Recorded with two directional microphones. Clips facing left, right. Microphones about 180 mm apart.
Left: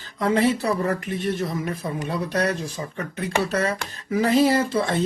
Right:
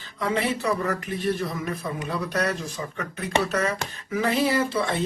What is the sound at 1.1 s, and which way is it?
Speech, 25° left (ahead or behind).